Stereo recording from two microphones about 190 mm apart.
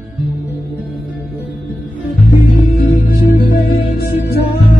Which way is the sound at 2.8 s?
50° left (ahead or behind).